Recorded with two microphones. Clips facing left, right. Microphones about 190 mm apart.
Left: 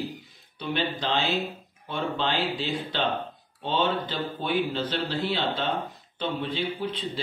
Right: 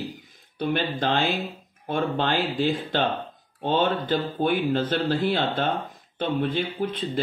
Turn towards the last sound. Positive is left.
turn(degrees=-50)  # may be behind; listen again after turning